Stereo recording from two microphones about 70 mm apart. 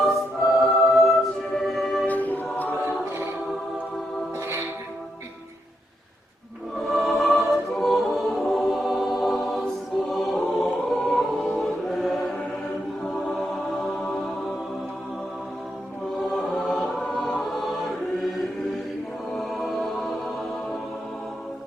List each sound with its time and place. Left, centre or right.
0.0 s music: centre
2.0 s choir: left
4.4 s music: right
6.7 s choir: centre
16.1 s choir: centre
19.4 s music: centre